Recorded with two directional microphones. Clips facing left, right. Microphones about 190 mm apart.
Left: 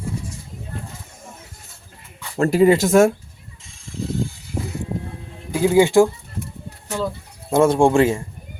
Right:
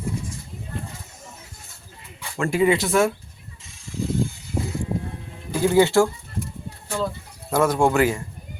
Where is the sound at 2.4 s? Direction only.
40° left (ahead or behind).